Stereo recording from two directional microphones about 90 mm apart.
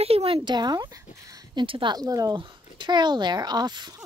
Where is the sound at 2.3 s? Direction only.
60° right (ahead or behind).